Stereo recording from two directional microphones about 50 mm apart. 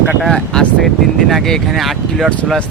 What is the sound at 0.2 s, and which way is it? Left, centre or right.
Speech, centre.